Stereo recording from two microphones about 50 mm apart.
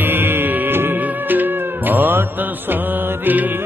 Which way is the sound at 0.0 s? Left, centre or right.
Right.